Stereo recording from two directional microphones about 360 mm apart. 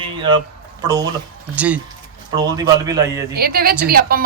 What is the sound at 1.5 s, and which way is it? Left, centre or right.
A man's voice, centre.